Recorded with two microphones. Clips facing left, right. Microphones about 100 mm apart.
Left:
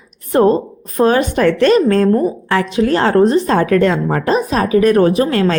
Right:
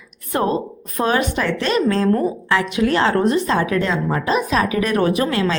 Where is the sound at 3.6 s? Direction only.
55° left (ahead or behind).